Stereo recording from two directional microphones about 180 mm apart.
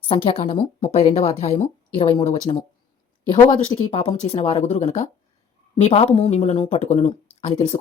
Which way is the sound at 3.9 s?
35° left (ahead or behind).